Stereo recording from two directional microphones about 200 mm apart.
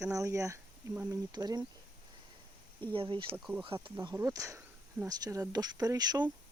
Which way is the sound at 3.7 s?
25° right (ahead or behind).